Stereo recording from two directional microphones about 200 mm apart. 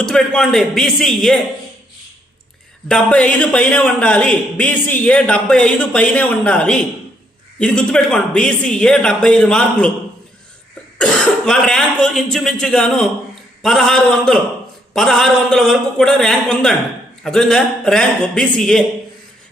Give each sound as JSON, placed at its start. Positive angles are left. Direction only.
{"t": 0.0, "sound": "a man's voice", "side_deg": 5}
{"t": 2.9, "sound": "a man's voice", "side_deg": 5}
{"t": 10.9, "sound": "a man's voice", "side_deg": 5}